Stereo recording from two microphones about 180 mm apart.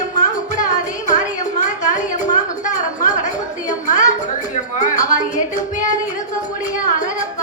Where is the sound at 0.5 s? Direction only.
45° left (ahead or behind).